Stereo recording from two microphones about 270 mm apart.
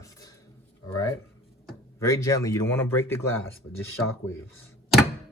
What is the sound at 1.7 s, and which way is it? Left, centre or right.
Speech, centre.